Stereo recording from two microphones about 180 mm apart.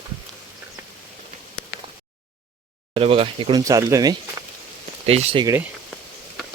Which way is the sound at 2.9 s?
30° right (ahead or behind).